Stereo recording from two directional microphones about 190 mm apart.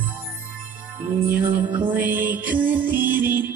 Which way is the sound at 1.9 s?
10° right (ahead or behind).